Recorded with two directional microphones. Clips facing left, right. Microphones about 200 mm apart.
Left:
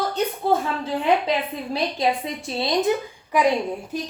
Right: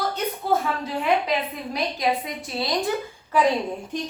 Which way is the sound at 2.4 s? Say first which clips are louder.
Left 4 dB; 25° left (ahead or behind).